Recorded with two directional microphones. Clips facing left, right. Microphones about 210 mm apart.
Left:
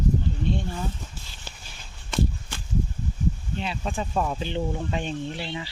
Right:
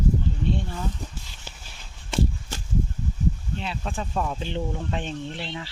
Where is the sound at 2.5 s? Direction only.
40° right (ahead or behind).